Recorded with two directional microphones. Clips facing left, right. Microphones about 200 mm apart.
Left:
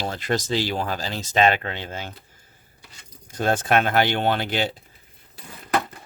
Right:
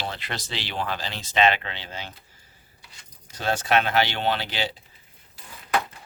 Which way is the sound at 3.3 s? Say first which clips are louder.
Left 3 dB; 50° left (ahead or behind).